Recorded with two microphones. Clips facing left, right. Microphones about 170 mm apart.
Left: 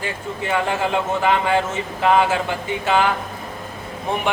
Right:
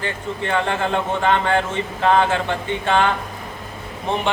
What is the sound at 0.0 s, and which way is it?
Speech, 10° left (ahead or behind).